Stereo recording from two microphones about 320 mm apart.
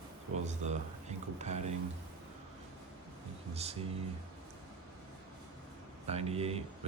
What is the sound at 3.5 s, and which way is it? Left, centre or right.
Speech, centre.